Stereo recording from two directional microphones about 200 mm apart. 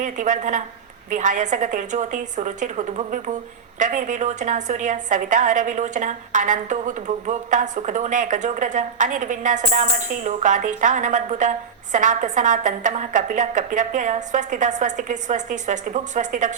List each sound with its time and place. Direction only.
0.0 s a woman's voice: 40° right (ahead or behind)